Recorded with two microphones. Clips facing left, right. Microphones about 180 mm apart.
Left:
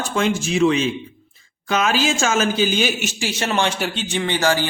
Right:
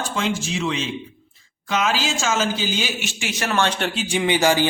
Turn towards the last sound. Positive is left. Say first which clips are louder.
# right 2 dB
turn(degrees=-15)  # may be behind; listen again after turning